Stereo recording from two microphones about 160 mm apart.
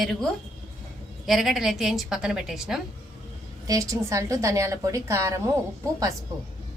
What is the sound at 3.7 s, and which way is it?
A woman's voice, 20° right (ahead or behind).